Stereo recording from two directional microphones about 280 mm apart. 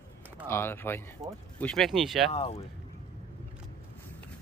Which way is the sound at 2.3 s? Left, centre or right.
Left.